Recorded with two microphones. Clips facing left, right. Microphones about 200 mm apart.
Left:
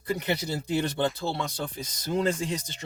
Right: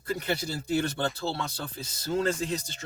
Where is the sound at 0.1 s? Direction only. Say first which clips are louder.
Left 2 dB; 20° left (ahead or behind).